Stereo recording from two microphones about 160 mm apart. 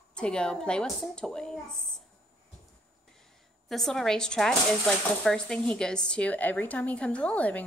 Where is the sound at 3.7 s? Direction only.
Centre (ahead or behind).